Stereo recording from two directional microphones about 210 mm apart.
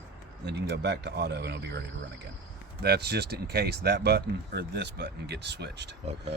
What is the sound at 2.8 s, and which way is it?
Speech, 50° right (ahead or behind).